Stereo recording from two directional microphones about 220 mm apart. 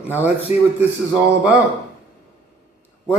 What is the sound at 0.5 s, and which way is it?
Speech, 30° left (ahead or behind).